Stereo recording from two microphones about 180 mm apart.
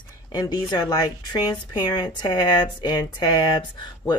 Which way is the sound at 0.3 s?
20° left (ahead or behind).